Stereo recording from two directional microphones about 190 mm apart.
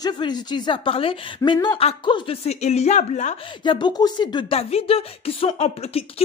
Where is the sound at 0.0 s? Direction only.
20° left (ahead or behind).